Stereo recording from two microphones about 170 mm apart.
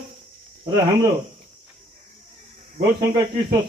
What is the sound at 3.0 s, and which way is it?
Speech, 25° right (ahead or behind).